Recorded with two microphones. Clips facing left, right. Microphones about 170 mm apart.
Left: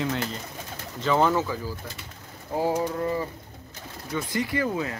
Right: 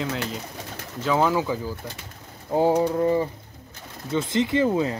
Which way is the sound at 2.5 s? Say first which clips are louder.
Right 5 dB; 30° right (ahead or behind).